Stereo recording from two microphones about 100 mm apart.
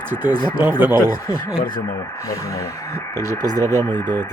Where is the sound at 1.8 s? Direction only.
25° left (ahead or behind).